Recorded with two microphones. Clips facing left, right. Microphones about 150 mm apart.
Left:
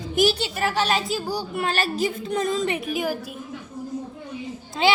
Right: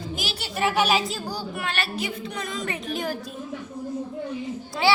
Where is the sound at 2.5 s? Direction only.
25° left (ahead or behind).